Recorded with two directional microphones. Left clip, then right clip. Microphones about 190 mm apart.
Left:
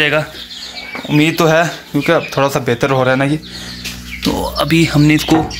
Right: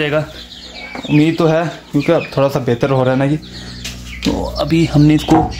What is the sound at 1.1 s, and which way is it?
Speech, 5° right (ahead or behind).